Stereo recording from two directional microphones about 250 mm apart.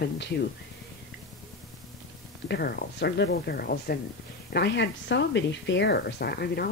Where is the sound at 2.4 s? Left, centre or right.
Left.